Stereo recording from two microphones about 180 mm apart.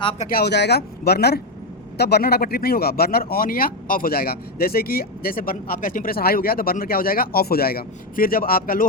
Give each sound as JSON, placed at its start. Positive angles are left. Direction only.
{"t": 0.0, "sound": "speech", "side_deg": 30}
{"t": 0.3, "sound": "speech", "side_deg": 60}